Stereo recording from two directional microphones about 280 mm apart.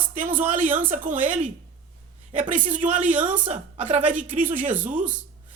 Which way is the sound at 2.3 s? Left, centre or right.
Right.